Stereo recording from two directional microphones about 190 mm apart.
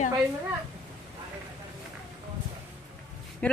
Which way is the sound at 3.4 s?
5° left (ahead or behind).